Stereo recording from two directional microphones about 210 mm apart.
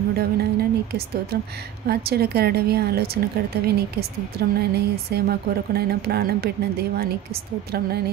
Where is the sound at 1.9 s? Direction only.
50° right (ahead or behind).